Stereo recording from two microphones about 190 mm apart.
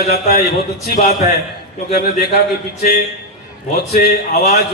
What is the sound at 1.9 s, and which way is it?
Speech, 55° left (ahead or behind).